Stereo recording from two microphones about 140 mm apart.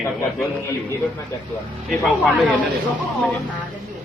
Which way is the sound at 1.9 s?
Centre (ahead or behind).